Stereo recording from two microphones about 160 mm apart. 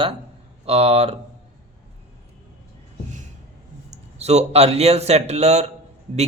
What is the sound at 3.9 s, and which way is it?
Speech, 45° right (ahead or behind).